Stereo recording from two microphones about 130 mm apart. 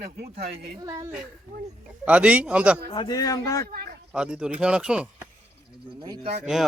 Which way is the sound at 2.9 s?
30° left (ahead or behind).